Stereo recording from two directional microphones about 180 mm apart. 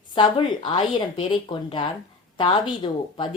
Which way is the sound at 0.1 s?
25° left (ahead or behind).